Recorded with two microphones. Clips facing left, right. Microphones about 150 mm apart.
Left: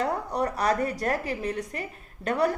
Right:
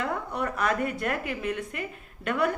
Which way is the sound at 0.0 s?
40° left (ahead or behind).